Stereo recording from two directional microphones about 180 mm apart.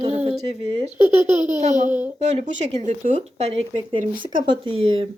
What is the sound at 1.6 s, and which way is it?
Speech, 40° right (ahead or behind).